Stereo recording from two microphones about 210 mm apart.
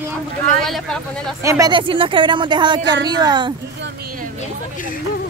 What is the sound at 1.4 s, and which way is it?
Speech, 15° right (ahead or behind).